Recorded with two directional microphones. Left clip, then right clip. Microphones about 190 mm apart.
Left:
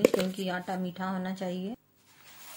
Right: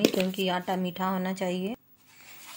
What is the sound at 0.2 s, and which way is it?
A woman's voice, 25° right (ahead or behind).